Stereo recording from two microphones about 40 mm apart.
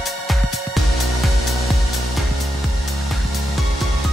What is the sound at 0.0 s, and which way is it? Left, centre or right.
Music, centre.